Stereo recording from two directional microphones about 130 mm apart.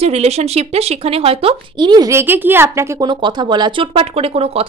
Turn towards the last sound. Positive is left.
turn(degrees=-45)  # may be behind; listen again after turning